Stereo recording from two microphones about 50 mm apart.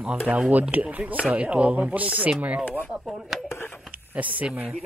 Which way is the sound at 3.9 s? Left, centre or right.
Right.